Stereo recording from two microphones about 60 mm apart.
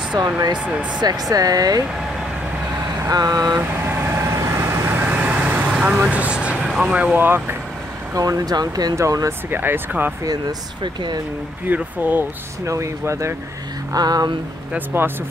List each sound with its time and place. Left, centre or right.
1.3 s speech: right
3.1 s speech: right
3.5 s vehicle: right
4.1 s vehicle: right
5.0 s vehicle: right
6.8 s speech: centre
7.2 s speech: right
8.1 s speech: right
9.5 s speech: right
11.6 s speech: right
12.6 s speech: right
13.9 s speech: right